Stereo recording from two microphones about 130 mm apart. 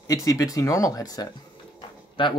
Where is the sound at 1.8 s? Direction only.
40° left (ahead or behind).